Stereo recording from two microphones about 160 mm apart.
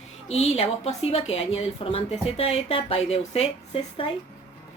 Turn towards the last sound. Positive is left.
turn(degrees=35)  # may be behind; listen again after turning